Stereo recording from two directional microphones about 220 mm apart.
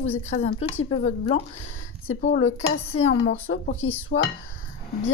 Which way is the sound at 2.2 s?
30° left (ahead or behind).